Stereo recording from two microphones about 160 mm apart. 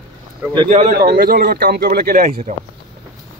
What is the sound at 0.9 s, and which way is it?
A man's voice, 75° right (ahead or behind).